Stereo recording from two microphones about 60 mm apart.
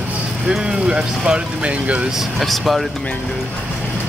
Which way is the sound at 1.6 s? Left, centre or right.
Right.